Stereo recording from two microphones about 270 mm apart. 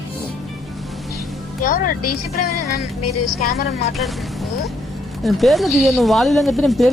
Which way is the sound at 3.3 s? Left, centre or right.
Left.